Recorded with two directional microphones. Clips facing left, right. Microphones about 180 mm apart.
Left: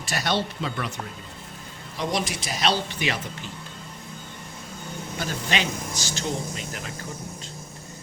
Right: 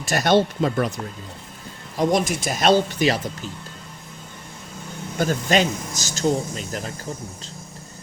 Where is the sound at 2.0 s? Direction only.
50° right (ahead or behind).